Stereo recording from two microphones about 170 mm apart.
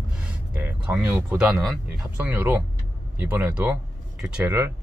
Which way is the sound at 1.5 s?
Centre (ahead or behind).